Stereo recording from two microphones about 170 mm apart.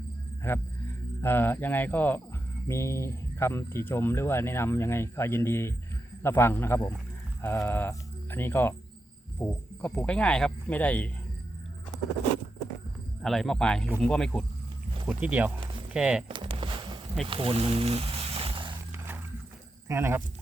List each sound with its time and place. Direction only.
0.4 s speech: 15° left (ahead or behind)
13.2 s speech: centre (ahead or behind)
15.0 s speech: 10° right (ahead or behind)
16.3 s a sound: 30° right (ahead or behind)
18.9 s roaring cats: 10° right (ahead or behind)
19.9 s speech: 15° right (ahead or behind)